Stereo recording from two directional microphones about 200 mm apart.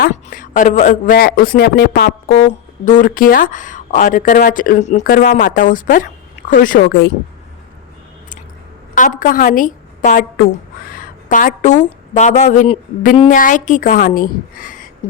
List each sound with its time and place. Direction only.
0.0 s speech: 45° left (ahead or behind)
2.8 s speech: 40° left (ahead or behind)
9.0 s a woman's voice: 40° left (ahead or behind)